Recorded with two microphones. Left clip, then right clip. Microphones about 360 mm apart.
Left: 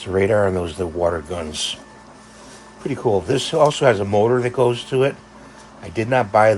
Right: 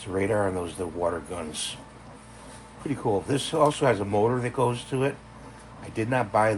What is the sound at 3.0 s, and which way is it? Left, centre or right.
Speech, left.